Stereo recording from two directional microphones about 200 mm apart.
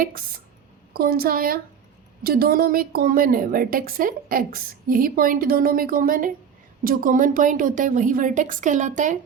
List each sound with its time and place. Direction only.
0.9 s a woman's voice: 50° right (ahead or behind)